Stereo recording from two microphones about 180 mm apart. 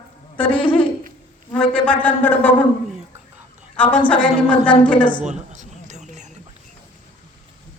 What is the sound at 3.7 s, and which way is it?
A man's voice, 10° left (ahead or behind).